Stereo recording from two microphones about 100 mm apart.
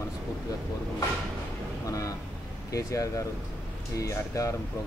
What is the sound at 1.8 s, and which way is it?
Speech, 35° left (ahead or behind).